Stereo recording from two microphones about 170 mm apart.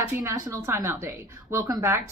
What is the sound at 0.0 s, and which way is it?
A woman's voice, 15° right (ahead or behind).